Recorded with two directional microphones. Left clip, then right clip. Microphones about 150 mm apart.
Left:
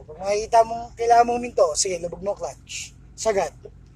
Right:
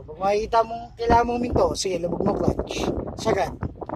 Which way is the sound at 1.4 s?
20° right (ahead or behind).